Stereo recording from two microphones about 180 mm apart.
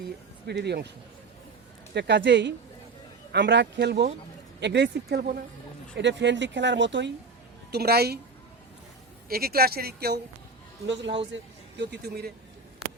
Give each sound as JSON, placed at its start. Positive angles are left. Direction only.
{"t": 0.4, "sound": "speech", "side_deg": -70}
{"t": 6.0, "sound": "speech", "side_deg": -80}
{"t": 7.7, "sound": "speech", "side_deg": -60}
{"t": 9.3, "sound": "speech", "side_deg": -55}
{"t": 10.8, "sound": "speech", "side_deg": -80}
{"t": 11.8, "sound": "speech", "side_deg": -65}